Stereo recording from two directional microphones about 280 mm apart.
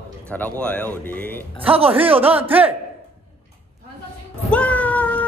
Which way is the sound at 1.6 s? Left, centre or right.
Centre.